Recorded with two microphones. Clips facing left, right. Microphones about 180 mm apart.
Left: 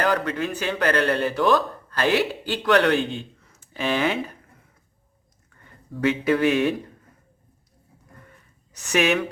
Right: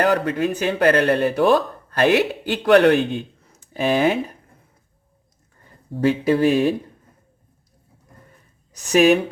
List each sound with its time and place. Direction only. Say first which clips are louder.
0.0 s speech: right 4 dB; 55° right (ahead or behind)
3.5 s a sound: right 5 dB; 45° right (ahead or behind)
5.9 s speech: right 3 dB; 35° right (ahead or behind)
8.9 s speech: right 7 dB; 35° right (ahead or behind)